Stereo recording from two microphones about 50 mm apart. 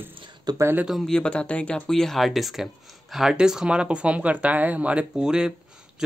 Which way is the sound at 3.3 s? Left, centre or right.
Centre.